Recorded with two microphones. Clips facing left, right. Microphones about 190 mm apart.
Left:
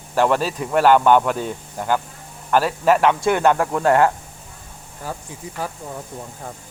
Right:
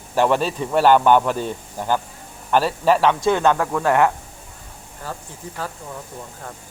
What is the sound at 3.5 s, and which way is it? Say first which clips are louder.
Speech: left 2 dB; 25° left (ahead or behind).